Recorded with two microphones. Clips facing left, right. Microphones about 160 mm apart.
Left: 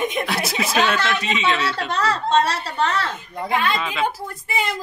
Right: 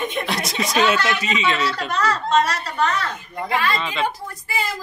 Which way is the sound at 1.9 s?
30° left (ahead or behind).